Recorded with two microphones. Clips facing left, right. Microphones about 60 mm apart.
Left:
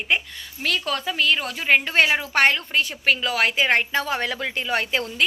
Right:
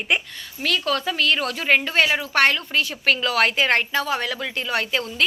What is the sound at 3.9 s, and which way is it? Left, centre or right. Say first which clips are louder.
Speech: right 1 dB; left.